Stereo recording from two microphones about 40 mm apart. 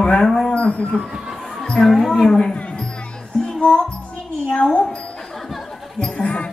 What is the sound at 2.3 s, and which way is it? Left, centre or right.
Speech, centre.